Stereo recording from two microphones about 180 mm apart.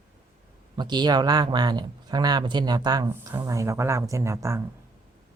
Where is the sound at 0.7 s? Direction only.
25° right (ahead or behind).